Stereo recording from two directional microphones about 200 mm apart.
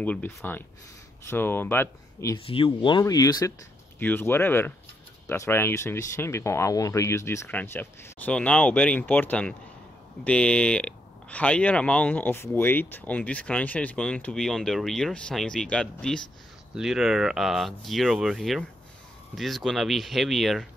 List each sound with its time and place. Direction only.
0.0 s speech: 10° left (ahead or behind)
2.3 s speech: 25° left (ahead or behind); by 20.6 s centre (ahead or behind)